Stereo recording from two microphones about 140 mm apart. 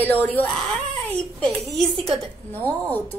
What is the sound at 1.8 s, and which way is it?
Speech, 40° right (ahead or behind).